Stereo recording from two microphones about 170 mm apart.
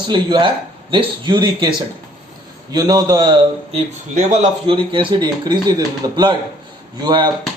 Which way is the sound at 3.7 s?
45° right (ahead or behind).